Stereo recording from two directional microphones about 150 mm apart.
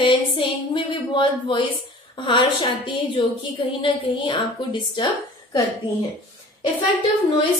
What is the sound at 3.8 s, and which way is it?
Speech, 35° left (ahead or behind).